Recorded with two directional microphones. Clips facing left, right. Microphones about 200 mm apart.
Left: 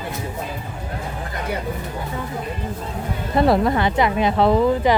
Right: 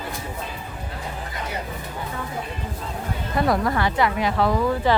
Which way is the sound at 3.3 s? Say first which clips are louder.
Left 5 dB; 25° left (ahead or behind).